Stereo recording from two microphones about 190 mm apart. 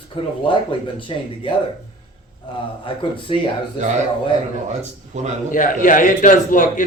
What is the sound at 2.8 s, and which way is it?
Speech, 25° left (ahead or behind).